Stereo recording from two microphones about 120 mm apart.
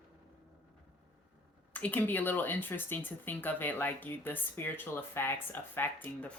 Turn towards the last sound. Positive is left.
turn(degrees=15)  # may be behind; listen again after turning